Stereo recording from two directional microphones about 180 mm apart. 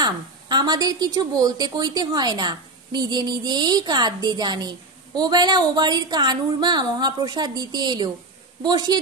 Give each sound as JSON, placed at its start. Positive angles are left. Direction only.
{"t": 0.0, "sound": "speech", "side_deg": -25}